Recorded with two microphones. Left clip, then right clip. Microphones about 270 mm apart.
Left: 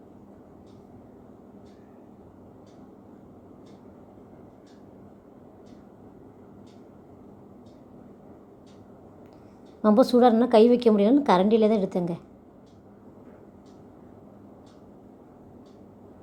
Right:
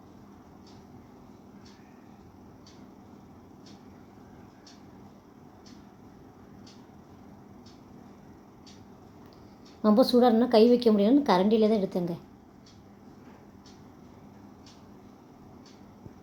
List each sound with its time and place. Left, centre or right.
9.8 s a woman's voice: centre